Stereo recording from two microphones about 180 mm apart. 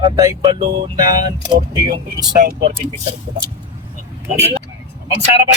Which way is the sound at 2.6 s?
40° right (ahead or behind).